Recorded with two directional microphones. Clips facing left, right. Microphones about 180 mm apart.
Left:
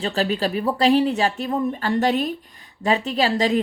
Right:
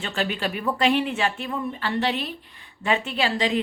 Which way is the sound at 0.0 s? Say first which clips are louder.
Left 5 dB; 35° left (ahead or behind).